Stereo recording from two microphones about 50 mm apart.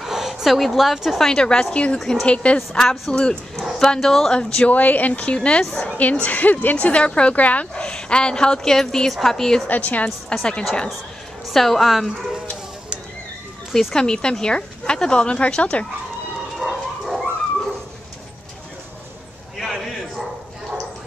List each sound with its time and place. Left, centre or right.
0.0 s a woman's voice: centre
1.2 s a woman's voice: centre
2.0 s a woman's voice: centre
2.2 s a woman's voice: left
3.8 s a woman's voice: centre
4.4 s a woman's voice: centre
9.7 s a woman's voice: left
10.3 s a woman's voice: centre
11.4 s a woman's voice: centre
13.9 s a woman's voice: centre
16.5 s bow-wow: centre
19.6 s a sound: centre